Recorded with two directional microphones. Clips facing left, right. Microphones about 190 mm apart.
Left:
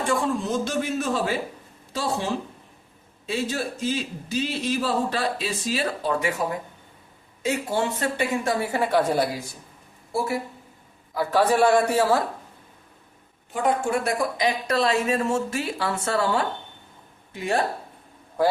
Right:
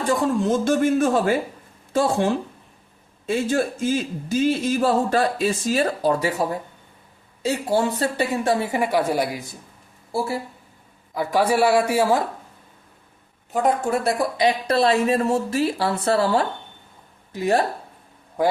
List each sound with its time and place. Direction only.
0.0 s a man's voice: 45° right (ahead or behind)
8.7 s a man's voice: 15° right (ahead or behind)
10.1 s speech: 30° right (ahead or behind)
11.1 s a man's voice: 15° right (ahead or behind)
13.5 s speech: 35° right (ahead or behind)